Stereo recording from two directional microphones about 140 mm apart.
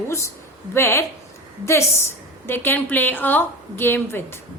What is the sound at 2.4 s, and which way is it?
A woman's voice, 15° left (ahead or behind).